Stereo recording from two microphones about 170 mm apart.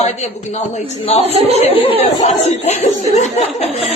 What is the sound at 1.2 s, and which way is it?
Speech, 35° right (ahead or behind).